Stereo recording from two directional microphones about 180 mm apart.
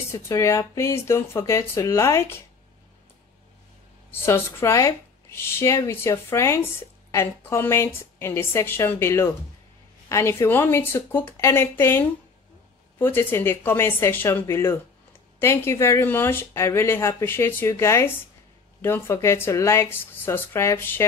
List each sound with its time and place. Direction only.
0.1 s speech: 15° left (ahead or behind)
4.1 s speech: 15° left (ahead or behind)
13.0 s speech: 10° left (ahead or behind)